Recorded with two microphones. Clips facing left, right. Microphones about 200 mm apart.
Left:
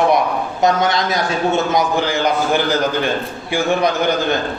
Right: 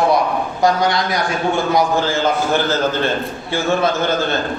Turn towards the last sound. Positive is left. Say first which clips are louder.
# left 1 dB
turn(degrees=15)  # may be behind; listen again after turning